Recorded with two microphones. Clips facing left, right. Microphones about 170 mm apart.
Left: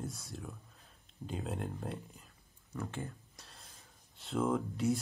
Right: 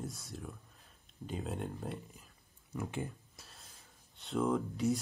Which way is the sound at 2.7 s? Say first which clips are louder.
Right 2 dB; 15° right (ahead or behind).